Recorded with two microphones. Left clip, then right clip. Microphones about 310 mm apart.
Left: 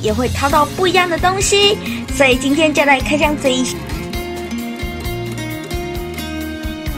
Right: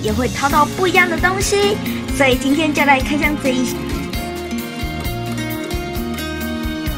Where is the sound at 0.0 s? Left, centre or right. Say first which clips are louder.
Left 1 dB; centre.